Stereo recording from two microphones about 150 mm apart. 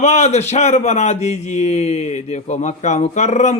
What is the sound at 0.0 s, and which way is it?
A man's voice, 50° left (ahead or behind).